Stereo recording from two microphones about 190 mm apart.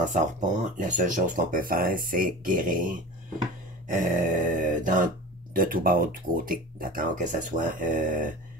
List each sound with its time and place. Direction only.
0.0 s speech: 40° right (ahead or behind)